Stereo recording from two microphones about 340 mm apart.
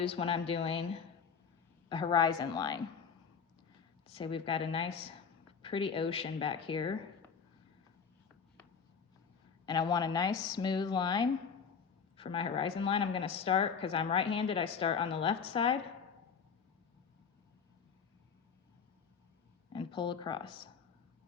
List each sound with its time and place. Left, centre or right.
0.0 s a woman's voice: centre
1.9 s a woman's voice: centre
4.1 s a woman's voice: centre
9.6 s a woman's voice: centre
19.7 s speech: centre